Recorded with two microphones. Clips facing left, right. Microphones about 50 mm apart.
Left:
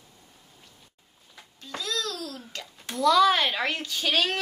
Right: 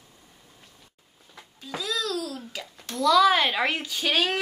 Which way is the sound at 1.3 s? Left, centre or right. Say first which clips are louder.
Right 3 dB; centre.